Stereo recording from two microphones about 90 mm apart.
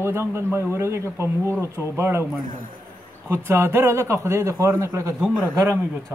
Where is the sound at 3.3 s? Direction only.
25° right (ahead or behind).